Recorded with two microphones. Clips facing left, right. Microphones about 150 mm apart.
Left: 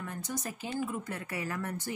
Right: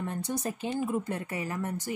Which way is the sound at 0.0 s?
30° right (ahead or behind).